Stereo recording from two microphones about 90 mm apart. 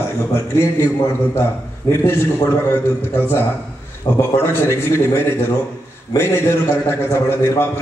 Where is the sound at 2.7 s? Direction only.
25° left (ahead or behind).